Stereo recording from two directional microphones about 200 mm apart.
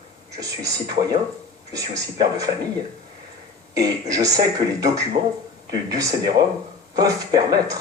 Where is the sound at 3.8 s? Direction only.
15° right (ahead or behind).